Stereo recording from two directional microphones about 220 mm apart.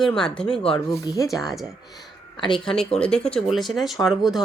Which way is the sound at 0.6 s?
20° left (ahead or behind).